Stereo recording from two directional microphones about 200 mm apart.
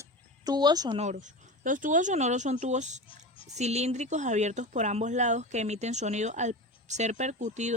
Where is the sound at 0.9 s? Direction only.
35° right (ahead or behind).